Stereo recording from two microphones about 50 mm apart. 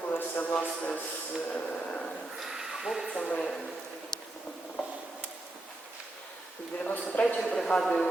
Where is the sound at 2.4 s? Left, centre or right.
Centre.